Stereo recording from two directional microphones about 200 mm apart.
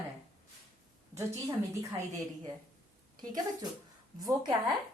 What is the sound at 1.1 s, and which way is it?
A woman's voice, 15° right (ahead or behind).